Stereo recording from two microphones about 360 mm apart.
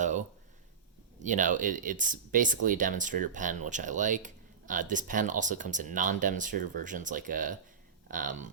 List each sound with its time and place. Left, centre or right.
1.2 s speech: right